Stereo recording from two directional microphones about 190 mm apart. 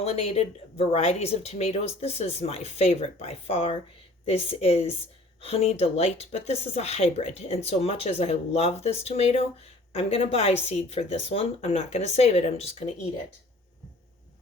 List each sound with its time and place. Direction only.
0.0 s speech: 30° left (ahead or behind)